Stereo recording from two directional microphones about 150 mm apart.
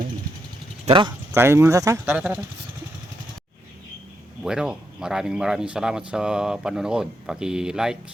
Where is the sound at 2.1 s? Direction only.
5° right (ahead or behind).